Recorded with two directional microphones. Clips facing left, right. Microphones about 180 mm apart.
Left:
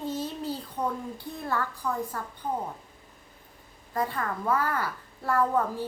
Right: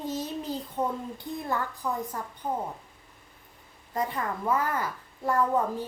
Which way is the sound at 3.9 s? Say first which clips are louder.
Even; 20° right (ahead or behind).